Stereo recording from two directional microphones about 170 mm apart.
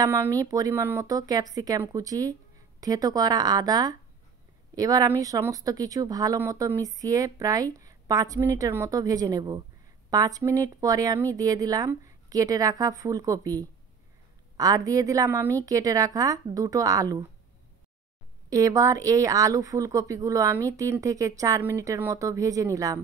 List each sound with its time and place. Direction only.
0.0 s speech: 15° right (ahead or behind)
18.5 s speech: 20° right (ahead or behind)